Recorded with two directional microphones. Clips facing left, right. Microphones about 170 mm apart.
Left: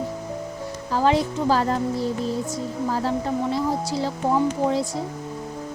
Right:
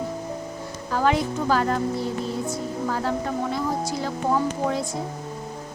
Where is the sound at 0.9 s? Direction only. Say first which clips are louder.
Left 2 dB; 30° left (ahead or behind).